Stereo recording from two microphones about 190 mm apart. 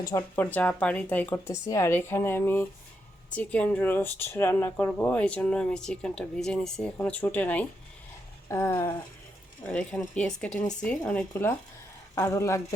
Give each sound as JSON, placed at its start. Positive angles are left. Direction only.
{"t": 0.0, "sound": "speech", "side_deg": 15}